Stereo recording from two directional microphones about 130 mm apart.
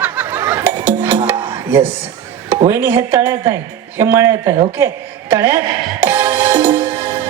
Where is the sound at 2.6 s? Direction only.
20° right (ahead or behind).